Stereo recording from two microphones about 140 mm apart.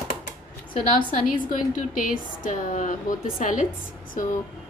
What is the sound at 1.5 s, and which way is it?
A woman's voice, 70° left (ahead or behind).